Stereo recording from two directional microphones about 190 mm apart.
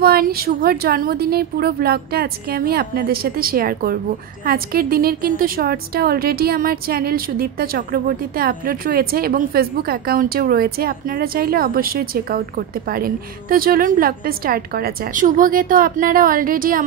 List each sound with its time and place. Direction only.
0.0 s a woman's voice: 55° right (ahead or behind)